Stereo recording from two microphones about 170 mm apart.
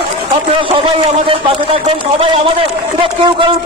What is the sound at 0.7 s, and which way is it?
A man's voice, 30° right (ahead or behind).